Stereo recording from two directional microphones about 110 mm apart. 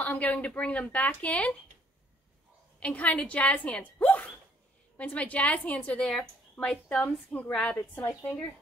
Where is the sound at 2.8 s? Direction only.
10° left (ahead or behind).